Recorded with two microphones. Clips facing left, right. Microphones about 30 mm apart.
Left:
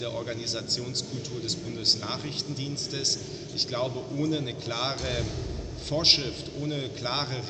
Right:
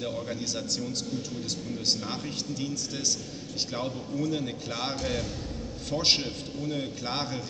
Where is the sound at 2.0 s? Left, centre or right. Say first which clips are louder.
Even; left.